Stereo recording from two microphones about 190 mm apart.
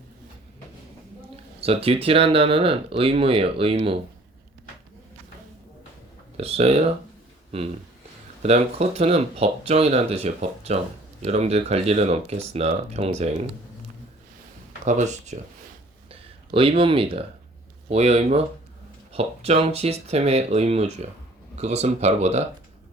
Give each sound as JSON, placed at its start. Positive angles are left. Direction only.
{"t": 1.6, "sound": "speech", "side_deg": -30}
{"t": 6.3, "sound": "speech", "side_deg": -35}
{"t": 8.4, "sound": "speech", "side_deg": -35}
{"t": 14.8, "sound": "speech", "side_deg": -40}